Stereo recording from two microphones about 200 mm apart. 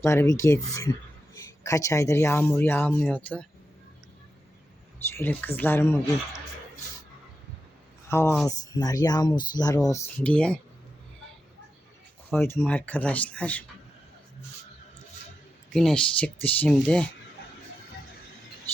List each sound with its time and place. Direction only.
0.0 s speech: 15° left (ahead or behind)
5.1 s speech: 10° left (ahead or behind)
8.1 s speech: 10° left (ahead or behind)
12.4 s speech: 10° left (ahead or behind)
15.7 s speech: 5° left (ahead or behind)